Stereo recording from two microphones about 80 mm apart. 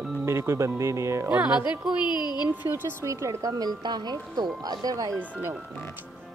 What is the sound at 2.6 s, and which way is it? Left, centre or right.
Speech, right.